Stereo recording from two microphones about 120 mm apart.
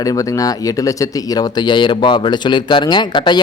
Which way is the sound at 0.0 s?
30° left (ahead or behind).